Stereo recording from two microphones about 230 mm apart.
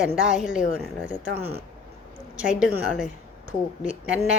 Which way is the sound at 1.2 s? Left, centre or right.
Right.